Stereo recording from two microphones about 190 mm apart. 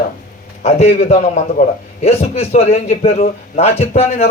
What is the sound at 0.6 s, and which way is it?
A man's voice, 35° left (ahead or behind).